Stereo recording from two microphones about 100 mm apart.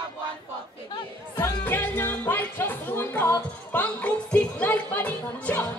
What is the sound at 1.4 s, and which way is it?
Music, 20° left (ahead or behind).